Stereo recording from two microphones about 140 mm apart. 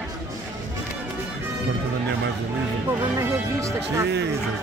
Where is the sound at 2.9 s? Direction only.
20° right (ahead or behind).